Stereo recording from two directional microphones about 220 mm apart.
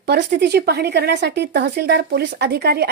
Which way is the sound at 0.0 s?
50° right (ahead or behind).